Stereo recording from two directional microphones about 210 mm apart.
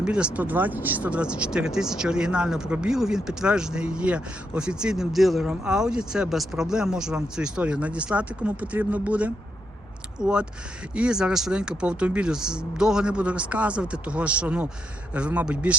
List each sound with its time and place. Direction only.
0.0 s a man's voice: 5° right (ahead or behind)